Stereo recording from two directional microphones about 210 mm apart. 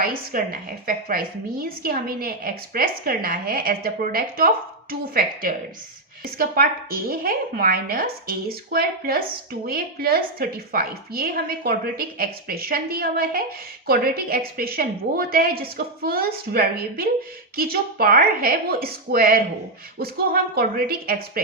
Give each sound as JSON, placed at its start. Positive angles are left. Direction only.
{"t": 0.0, "sound": "a woman's voice", "side_deg": -45}